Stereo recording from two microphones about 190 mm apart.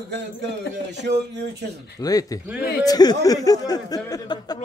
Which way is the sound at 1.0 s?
65° right (ahead or behind).